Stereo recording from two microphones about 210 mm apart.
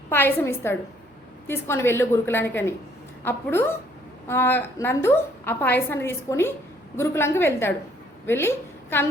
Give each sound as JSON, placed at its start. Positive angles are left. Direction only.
{"t": 0.1, "sound": "a woman's voice", "side_deg": 10}